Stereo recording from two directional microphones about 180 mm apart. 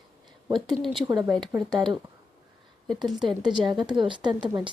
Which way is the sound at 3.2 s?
25° right (ahead or behind).